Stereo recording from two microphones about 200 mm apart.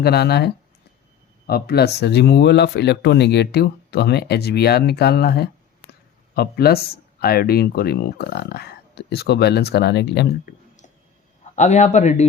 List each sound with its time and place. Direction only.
0.0 s speech: 55° left (ahead or behind)
5.9 s a sound: 50° left (ahead or behind)
7.2 s speech: 50° left (ahead or behind)
11.5 s a man's voice: 35° left (ahead or behind)